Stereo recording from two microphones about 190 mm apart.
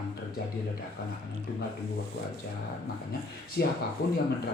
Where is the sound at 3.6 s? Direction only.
60° left (ahead or behind).